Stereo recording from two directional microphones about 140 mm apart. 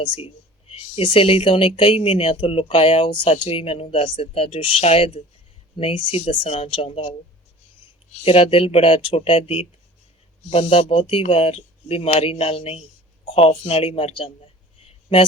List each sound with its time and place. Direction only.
0.0 s speech: 40° left (ahead or behind)